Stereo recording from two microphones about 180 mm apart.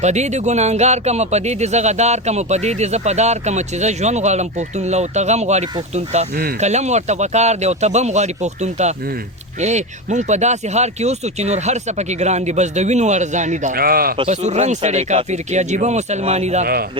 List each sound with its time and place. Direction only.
0.0 s speech: 40° right (ahead or behind); by 14.2 s 55° right (ahead or behind)
14.2 s speech: 40° right (ahead or behind)